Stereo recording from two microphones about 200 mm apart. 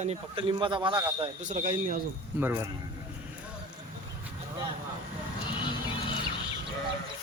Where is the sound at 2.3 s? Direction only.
10° right (ahead or behind).